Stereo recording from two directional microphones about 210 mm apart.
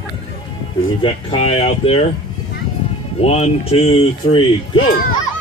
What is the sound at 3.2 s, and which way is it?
Speech, 30° left (ahead or behind).